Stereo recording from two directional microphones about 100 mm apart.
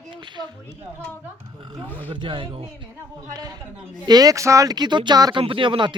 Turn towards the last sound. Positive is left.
turn(degrees=-55)  # may be behind; listen again after turning